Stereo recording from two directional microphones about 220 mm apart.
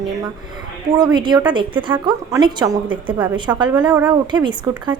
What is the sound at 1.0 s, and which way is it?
A woman's voice, 20° right (ahead or behind).